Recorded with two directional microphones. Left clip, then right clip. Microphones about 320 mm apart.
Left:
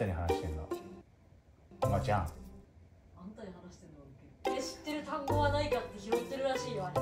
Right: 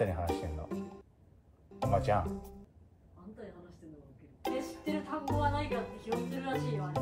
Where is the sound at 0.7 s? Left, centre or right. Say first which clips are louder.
Left 3 dB; centre.